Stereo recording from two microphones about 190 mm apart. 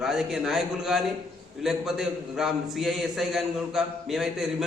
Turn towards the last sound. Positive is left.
turn(degrees=0)  # may be behind; listen again after turning